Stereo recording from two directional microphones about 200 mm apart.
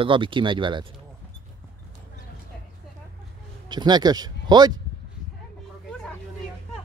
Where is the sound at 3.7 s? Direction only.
20° right (ahead or behind).